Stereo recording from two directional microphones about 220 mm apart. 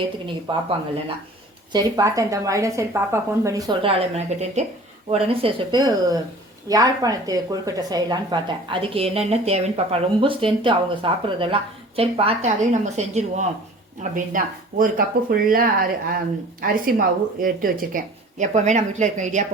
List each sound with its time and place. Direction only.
0.5 s a woman's voice: 20° right (ahead or behind)
1.7 s a woman's voice: 15° right (ahead or behind); by 19.5 s 35° right (ahead or behind)